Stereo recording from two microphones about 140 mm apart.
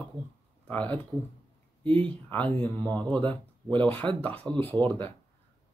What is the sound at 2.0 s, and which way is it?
Speech, 10° left (ahead or behind).